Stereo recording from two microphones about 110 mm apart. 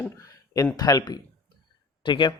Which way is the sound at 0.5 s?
35° left (ahead or behind).